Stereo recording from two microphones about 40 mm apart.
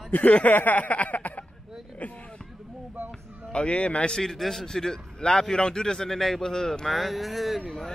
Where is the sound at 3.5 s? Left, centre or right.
Left.